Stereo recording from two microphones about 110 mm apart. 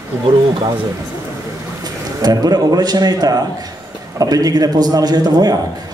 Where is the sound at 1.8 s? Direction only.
35° right (ahead or behind).